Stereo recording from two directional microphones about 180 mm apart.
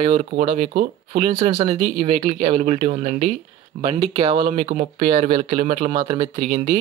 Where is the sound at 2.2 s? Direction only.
35° right (ahead or behind).